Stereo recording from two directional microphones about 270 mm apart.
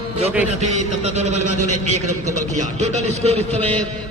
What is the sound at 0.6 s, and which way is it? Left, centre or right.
A man's voice, right.